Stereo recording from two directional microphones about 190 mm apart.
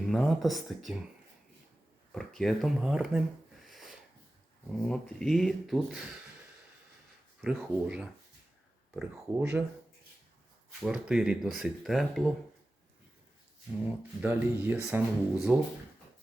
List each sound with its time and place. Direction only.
0.0 s speech: centre (ahead or behind)
2.1 s speech: centre (ahead or behind)
7.4 s speech: 5° right (ahead or behind)
10.8 s speech: 5° right (ahead or behind)
14.2 s speech: 10° right (ahead or behind)